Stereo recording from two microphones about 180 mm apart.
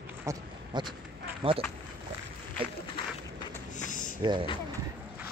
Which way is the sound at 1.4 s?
30° right (ahead or behind).